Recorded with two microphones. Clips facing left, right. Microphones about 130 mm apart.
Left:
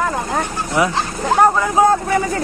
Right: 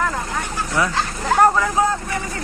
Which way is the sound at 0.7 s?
20° left (ahead or behind).